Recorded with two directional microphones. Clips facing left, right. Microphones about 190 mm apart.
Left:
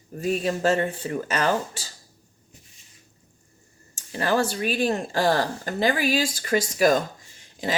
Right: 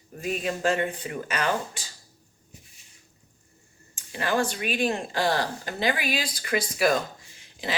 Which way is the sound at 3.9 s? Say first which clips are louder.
Left 3 dB; 40° left (ahead or behind).